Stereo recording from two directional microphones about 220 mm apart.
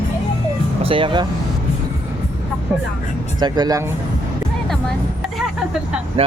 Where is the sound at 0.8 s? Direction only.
25° right (ahead or behind).